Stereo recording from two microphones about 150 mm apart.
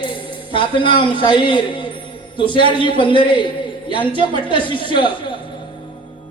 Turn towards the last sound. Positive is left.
turn(degrees=35)  # may be behind; listen again after turning